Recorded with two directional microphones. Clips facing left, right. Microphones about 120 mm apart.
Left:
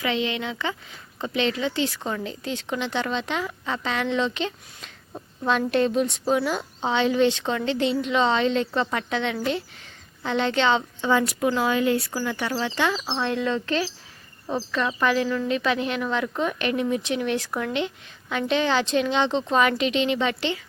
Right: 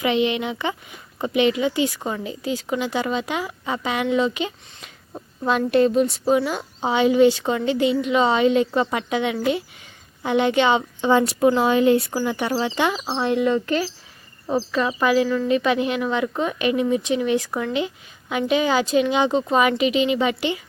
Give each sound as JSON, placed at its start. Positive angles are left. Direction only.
{"t": 0.0, "sound": "speech", "side_deg": -20}
{"t": 11.1, "sound": "speech", "side_deg": -25}